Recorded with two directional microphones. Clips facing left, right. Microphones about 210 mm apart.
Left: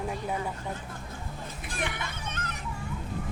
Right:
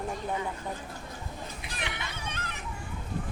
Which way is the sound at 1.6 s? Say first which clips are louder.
Left 6 dB; 50° left (ahead or behind).